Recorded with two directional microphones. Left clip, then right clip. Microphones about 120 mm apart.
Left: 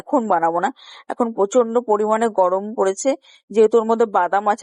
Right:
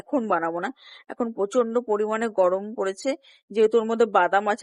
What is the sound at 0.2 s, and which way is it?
Speech, 30° left (ahead or behind).